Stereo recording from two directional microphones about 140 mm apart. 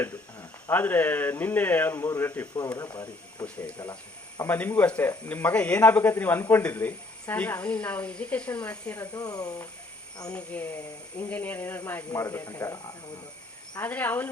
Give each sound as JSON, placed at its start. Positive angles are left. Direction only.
{"t": 0.0, "sound": "speech", "side_deg": 15}
{"t": 3.4, "sound": "speech", "side_deg": 10}
{"t": 9.1, "sound": "speech", "side_deg": 25}
{"t": 10.2, "sound": "speech", "side_deg": 10}